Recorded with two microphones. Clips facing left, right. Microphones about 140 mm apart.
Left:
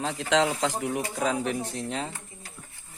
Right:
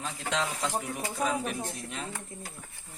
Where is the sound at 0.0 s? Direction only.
75° left (ahead or behind).